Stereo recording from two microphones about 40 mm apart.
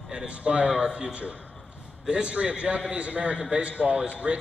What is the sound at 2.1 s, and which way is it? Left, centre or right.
A man's voice, right.